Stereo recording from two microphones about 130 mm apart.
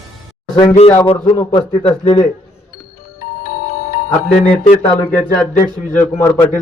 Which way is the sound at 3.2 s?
90° left.